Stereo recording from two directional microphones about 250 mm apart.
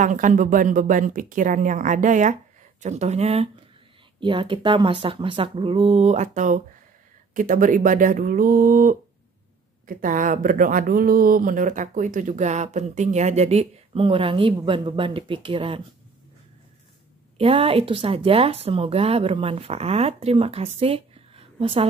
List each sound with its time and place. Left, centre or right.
0.0 s speech: right
17.4 s speech: right